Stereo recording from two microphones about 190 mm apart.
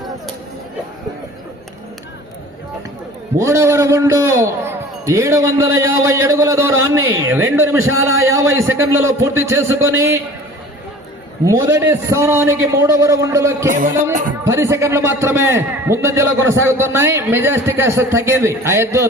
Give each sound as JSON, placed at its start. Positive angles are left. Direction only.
{"t": 3.3, "sound": "a man's voice", "side_deg": -15}
{"t": 11.4, "sound": "a man's voice", "side_deg": -15}
{"t": 13.7, "sound": "music", "side_deg": -45}
{"t": 14.4, "sound": "a man's voice", "side_deg": -15}